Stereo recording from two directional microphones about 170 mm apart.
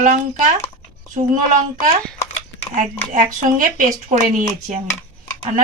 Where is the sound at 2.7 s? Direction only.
50° right (ahead or behind).